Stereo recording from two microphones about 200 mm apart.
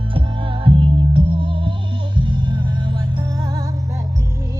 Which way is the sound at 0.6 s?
25° right (ahead or behind).